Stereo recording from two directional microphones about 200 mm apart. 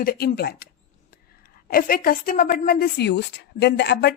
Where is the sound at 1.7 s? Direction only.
45° left (ahead or behind).